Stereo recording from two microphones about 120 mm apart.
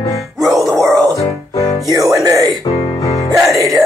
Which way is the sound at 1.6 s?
25° left (ahead or behind).